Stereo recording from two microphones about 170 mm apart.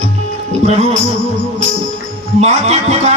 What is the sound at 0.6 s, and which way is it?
Speech, 40° right (ahead or behind).